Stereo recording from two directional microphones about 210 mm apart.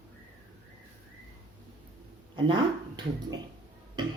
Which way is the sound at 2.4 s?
20° right (ahead or behind).